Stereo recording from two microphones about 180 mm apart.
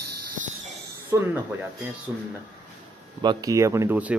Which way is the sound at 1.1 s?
15° right (ahead or behind).